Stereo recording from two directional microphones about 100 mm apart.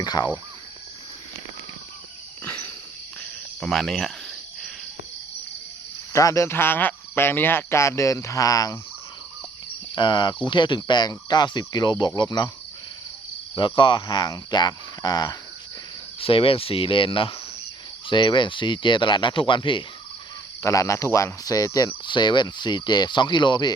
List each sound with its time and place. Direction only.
0.0 s speech: 45° left (ahead or behind)
2.4 s a sound: 20° left (ahead or behind)
3.6 s cricket: 5° left (ahead or behind)
6.1 s speech: 30° left (ahead or behind)
9.9 s speech: 50° left (ahead or behind)
13.6 s speech: 50° left (ahead or behind)
16.2 s speech: 65° left (ahead or behind)
20.6 s speech: 35° left (ahead or behind)
22.0 s speech: 50° left (ahead or behind)